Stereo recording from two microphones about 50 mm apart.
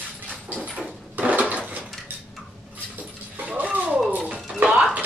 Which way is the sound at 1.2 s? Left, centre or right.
Right.